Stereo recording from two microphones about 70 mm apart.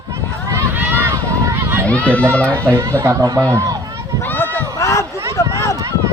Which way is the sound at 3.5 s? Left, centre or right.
Right.